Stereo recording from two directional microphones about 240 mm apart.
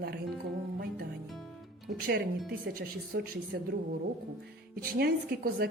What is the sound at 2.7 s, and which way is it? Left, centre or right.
A woman's voice, right.